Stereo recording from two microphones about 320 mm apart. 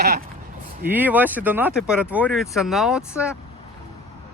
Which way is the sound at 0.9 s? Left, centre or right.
Centre.